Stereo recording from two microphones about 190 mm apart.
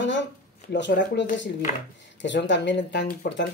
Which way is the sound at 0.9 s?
50° left (ahead or behind).